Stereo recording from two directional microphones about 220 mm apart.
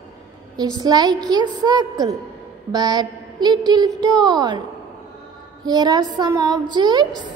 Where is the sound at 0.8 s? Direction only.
20° right (ahead or behind).